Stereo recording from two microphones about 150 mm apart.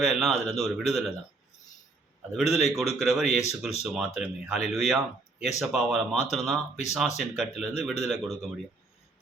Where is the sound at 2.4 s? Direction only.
45° left (ahead or behind).